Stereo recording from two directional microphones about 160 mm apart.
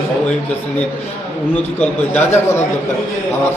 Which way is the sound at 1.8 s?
10° left (ahead or behind).